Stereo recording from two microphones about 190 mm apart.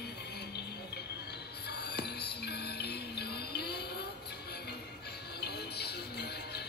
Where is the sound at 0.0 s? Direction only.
60° left (ahead or behind).